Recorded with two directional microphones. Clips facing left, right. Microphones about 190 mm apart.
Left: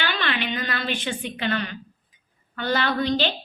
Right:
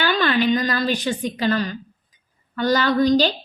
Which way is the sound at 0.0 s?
40° right (ahead or behind).